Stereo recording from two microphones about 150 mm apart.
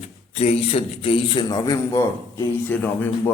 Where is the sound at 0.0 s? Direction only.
40° left (ahead or behind).